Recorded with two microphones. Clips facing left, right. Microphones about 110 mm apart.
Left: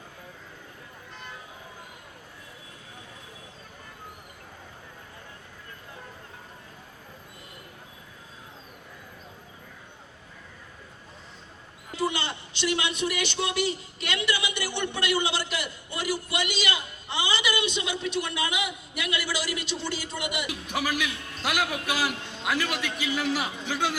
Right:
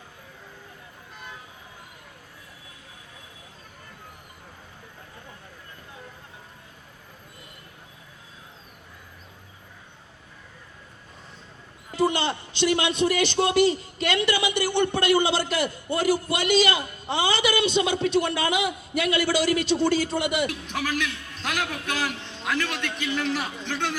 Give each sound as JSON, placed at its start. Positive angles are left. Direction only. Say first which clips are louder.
{"t": 12.3, "sound": "a man's voice", "louder": "right 5 dB", "side_deg": -30}
{"t": 14.6, "sound": "a man's voice", "louder": "right 7 dB", "side_deg": -45}
{"t": 20.5, "sound": "a man's voice", "louder": "even", "side_deg": 10}